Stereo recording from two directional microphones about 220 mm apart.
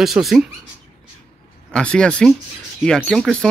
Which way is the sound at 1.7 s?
5° left (ahead or behind).